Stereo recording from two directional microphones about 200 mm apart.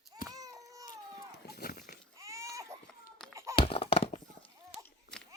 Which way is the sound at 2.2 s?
15° right (ahead or behind).